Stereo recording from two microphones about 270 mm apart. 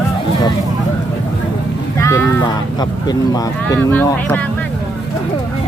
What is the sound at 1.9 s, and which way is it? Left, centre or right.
Speech, centre.